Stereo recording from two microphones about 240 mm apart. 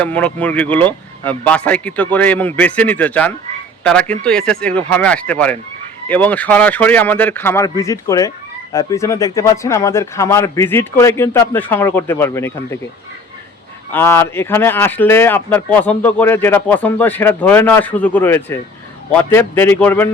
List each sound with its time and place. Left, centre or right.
0.0 s speech: centre
13.9 s speech: centre